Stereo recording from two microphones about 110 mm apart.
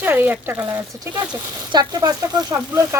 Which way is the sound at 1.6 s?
35° right (ahead or behind).